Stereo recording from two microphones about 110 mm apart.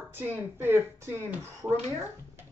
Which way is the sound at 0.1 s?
15° right (ahead or behind).